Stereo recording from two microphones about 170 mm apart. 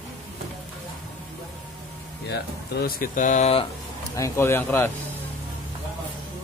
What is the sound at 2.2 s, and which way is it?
Speech, 70° left (ahead or behind).